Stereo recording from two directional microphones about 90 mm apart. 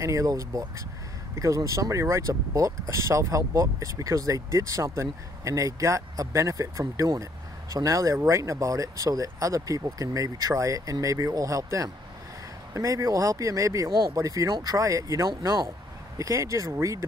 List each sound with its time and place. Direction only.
0.0 s speech: 35° right (ahead or behind)